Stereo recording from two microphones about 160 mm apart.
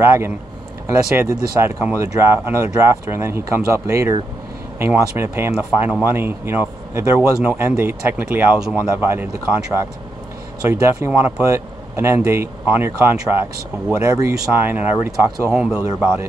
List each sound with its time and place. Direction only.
0.0 s speech: 15° right (ahead or behind)
10.7 s speech: 15° right (ahead or behind)